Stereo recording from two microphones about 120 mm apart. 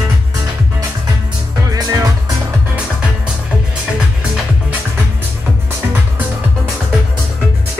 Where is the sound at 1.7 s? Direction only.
30° right (ahead or behind).